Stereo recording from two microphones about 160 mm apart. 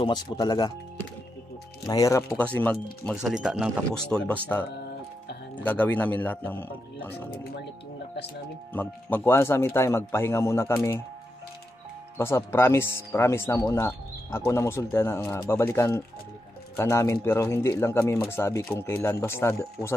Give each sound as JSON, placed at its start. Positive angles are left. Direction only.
{"t": 0.0, "sound": "speech", "side_deg": 25}
{"t": 1.9, "sound": "speech", "side_deg": 20}
{"t": 3.2, "sound": "speech", "side_deg": -5}
{"t": 8.7, "sound": "speech", "side_deg": 10}
{"t": 12.2, "sound": "speech", "side_deg": 15}